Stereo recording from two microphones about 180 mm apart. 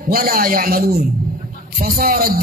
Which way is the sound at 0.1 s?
55° right (ahead or behind).